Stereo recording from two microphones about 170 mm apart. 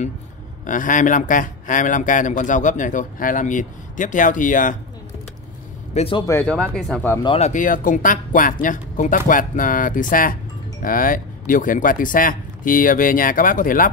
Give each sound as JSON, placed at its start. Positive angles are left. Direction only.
{"t": 0.7, "sound": "speech", "side_deg": 50}
{"t": 5.9, "sound": "speech", "side_deg": 35}
{"t": 6.4, "sound": "speech", "side_deg": 5}
{"t": 7.2, "sound": "speech", "side_deg": 40}